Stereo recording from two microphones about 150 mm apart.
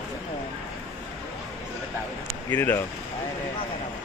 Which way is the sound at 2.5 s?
15° left (ahead or behind).